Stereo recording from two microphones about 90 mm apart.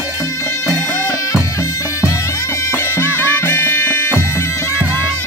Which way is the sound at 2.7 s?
25° left (ahead or behind).